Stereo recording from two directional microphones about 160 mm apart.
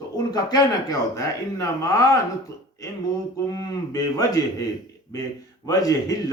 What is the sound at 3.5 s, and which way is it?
Speech, 20° left (ahead or behind).